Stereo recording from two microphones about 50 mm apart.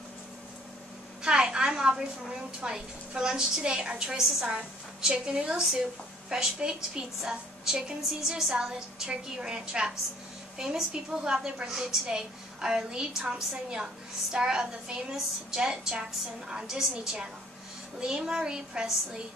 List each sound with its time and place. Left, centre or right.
1.2 s a woman's voice: centre